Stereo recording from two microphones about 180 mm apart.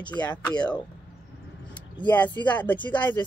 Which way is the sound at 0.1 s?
10° left (ahead or behind).